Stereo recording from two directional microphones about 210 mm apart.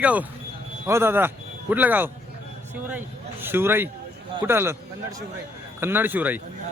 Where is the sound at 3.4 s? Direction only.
10° right (ahead or behind).